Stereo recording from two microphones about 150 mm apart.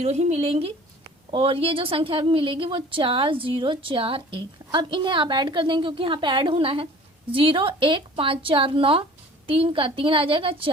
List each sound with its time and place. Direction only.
0.0 s a woman's voice: 45° right (ahead or behind)